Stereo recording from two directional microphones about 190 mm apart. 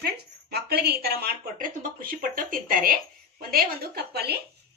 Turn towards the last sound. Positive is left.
turn(degrees=-55)  # may be behind; listen again after turning